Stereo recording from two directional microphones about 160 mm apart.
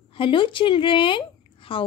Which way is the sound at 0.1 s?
30° left (ahead or behind).